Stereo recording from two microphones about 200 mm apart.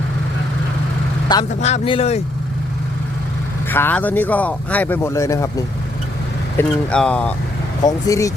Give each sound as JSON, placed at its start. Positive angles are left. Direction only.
{"t": 1.3, "sound": "speech", "side_deg": 20}
{"t": 3.7, "sound": "speech", "side_deg": 10}
{"t": 6.6, "sound": "speech", "side_deg": 5}
{"t": 7.9, "sound": "speech", "side_deg": 15}